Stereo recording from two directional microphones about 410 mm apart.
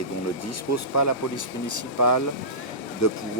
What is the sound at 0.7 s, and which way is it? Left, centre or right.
Speech, left.